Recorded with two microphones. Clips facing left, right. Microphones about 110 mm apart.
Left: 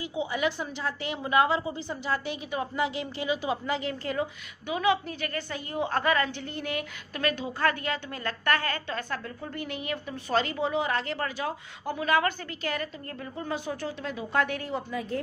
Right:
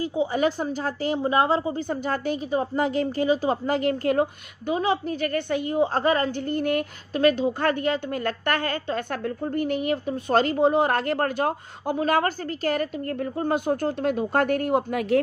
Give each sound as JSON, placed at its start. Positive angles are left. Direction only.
{"t": 0.0, "sound": "a woman's voice", "side_deg": -40}
{"t": 4.7, "sound": "a woman's voice", "side_deg": -40}
{"t": 5.9, "sound": "a woman's voice", "side_deg": -35}